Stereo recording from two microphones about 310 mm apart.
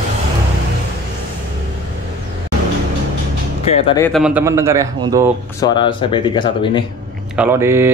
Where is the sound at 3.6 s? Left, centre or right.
Centre.